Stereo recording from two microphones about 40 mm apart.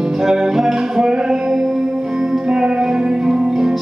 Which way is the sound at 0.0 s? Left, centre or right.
Centre.